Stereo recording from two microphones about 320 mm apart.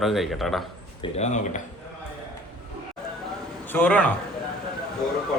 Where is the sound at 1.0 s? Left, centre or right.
Centre.